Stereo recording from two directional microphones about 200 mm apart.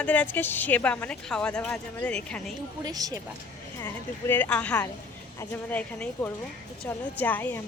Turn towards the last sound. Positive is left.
turn(degrees=10)  # may be behind; listen again after turning